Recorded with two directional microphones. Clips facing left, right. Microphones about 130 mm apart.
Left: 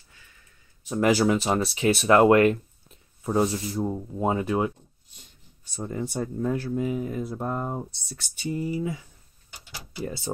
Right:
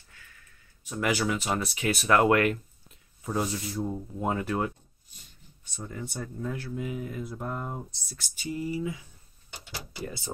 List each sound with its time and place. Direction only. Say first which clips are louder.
0.8 s speech: left 7 dB; 30° left (ahead or behind); by 4.7 s 15° left (ahead or behind)
5.8 s speech: left 7 dB; 30° left (ahead or behind)